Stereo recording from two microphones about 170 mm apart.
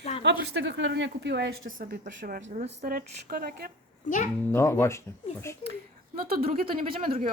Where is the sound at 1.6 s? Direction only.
50° right (ahead or behind).